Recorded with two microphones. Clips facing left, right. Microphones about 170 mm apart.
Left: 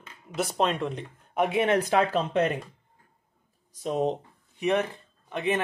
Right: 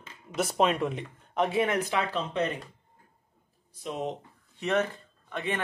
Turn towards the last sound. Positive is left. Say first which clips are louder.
# left 5 dB
turn(degrees=20)  # may be behind; listen again after turning